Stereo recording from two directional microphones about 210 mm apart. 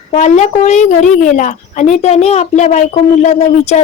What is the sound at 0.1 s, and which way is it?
A woman's voice, 35° left (ahead or behind).